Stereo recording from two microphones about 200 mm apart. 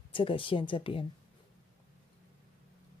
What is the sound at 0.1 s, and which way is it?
Speech, 25° left (ahead or behind).